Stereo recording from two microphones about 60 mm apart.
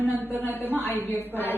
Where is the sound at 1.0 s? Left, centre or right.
Left.